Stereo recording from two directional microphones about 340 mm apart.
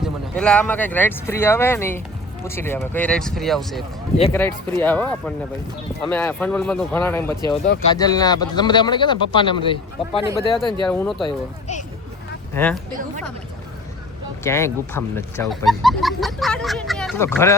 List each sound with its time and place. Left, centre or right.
0.0 s speech: centre
10.8 s speech: centre
11.2 s speech: centre
12.5 s speech: centre
14.4 s speech: centre